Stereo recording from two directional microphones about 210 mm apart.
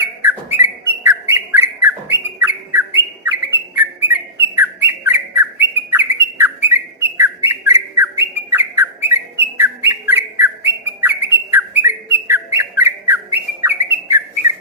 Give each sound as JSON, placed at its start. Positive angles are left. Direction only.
{"t": 0.0, "sound": "bird", "side_deg": -10}